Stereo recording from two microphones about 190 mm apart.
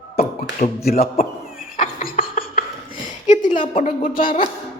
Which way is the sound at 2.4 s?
30° left (ahead or behind).